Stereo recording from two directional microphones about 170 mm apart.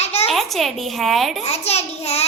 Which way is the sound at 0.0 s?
40° left (ahead or behind).